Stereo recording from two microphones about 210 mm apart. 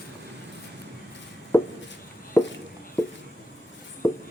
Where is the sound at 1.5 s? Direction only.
10° left (ahead or behind).